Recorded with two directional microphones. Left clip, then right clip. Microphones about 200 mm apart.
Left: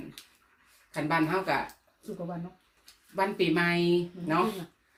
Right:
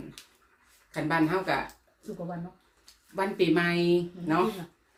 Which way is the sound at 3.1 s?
10° right (ahead or behind).